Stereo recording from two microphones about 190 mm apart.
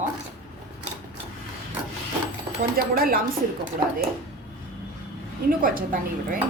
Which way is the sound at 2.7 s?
50° right (ahead or behind).